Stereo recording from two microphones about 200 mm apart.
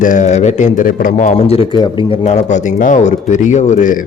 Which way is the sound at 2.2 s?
35° left (ahead or behind).